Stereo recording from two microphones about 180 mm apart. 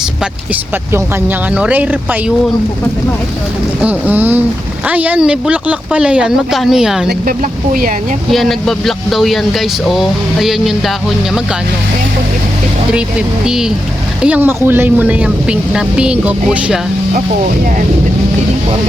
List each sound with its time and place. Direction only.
0.5 s speech: 10° right (ahead or behind)
3.8 s speech: 10° right (ahead or behind)
7.1 s speech: 55° right (ahead or behind)
8.3 s speech: centre (ahead or behind)
12.9 s speech: 5° right (ahead or behind)